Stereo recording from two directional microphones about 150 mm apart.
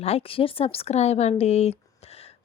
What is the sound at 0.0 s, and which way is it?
Speech, 40° left (ahead or behind).